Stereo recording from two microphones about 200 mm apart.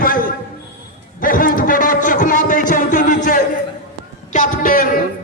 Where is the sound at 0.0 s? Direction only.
45° left (ahead or behind).